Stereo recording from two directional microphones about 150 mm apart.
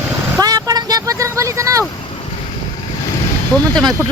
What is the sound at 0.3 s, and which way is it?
Vehicle, 25° right (ahead or behind).